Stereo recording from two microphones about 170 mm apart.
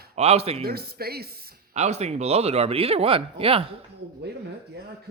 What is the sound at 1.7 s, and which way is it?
Speech, 40° right (ahead or behind).